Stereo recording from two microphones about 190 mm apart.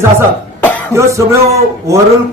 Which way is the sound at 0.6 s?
10° left (ahead or behind).